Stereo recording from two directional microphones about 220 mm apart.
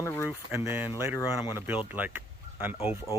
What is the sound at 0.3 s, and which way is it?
Speech, 10° right (ahead or behind).